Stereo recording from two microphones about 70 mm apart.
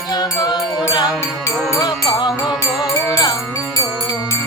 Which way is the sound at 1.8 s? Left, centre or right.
Left.